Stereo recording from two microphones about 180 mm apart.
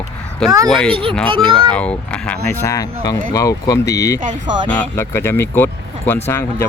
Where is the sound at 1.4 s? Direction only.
5° left (ahead or behind).